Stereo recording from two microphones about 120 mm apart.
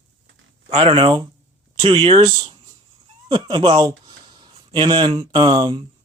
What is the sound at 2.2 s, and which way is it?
Speech, 35° right (ahead or behind).